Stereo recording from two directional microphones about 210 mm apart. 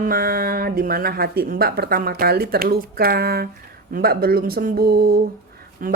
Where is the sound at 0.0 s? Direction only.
45° right (ahead or behind).